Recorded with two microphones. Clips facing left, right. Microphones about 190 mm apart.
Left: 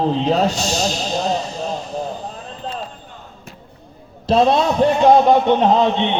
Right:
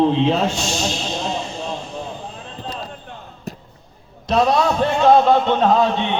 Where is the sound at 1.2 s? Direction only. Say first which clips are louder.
Left 4 dB; 40° left (ahead or behind).